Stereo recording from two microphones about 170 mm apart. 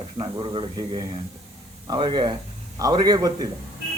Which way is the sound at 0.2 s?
30° right (ahead or behind).